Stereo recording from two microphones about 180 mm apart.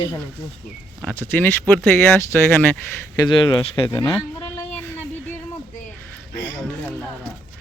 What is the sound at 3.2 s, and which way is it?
Speech, 25° left (ahead or behind).